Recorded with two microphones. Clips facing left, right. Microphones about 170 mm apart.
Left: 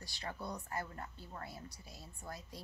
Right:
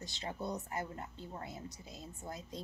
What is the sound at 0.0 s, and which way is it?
A woman's voice, 20° right (ahead or behind).